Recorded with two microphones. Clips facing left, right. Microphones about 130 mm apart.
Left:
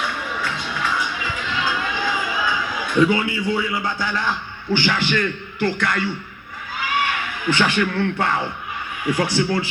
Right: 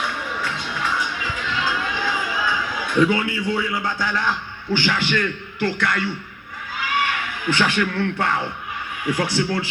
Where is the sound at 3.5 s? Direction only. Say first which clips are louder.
Left 1 dB; 5° left (ahead or behind).